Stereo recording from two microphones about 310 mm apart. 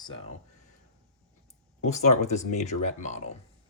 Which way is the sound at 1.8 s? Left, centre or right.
Left.